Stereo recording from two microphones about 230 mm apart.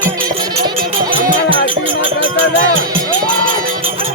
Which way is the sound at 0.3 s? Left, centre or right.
Centre.